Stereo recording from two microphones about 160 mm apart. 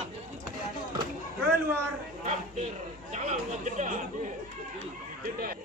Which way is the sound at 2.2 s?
45° right (ahead or behind).